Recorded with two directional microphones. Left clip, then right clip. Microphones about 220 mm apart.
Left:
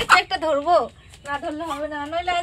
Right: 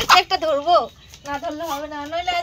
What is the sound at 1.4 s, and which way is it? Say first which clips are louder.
Speech: right 1 dB; 20° right (ahead or behind).